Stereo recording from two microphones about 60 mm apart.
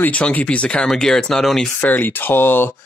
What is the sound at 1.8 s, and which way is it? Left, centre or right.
Speech, left.